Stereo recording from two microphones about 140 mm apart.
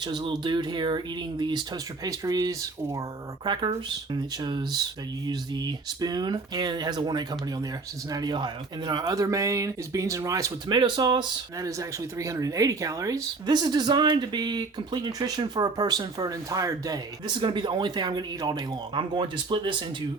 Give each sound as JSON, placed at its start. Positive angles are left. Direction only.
{"t": 0.0, "sound": "speech", "side_deg": -35}